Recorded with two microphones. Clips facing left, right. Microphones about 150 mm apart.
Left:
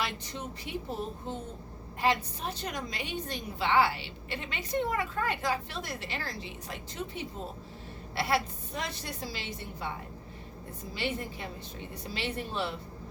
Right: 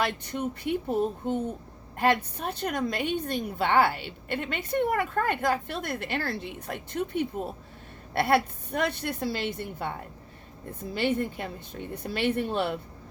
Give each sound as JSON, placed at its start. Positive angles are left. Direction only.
{"t": 0.0, "sound": "a woman's voice", "side_deg": -55}
{"t": 10.9, "sound": "a woman's voice", "side_deg": -55}